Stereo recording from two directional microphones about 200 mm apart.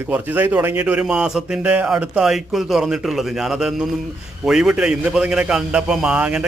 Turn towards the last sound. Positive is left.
turn(degrees=-5)  # may be behind; listen again after turning